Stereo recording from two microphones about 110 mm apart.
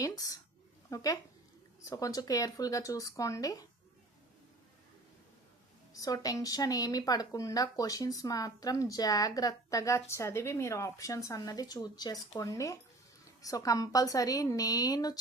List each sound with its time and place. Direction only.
0.0 s speech: 35° left (ahead or behind)
5.9 s speech: 30° left (ahead or behind)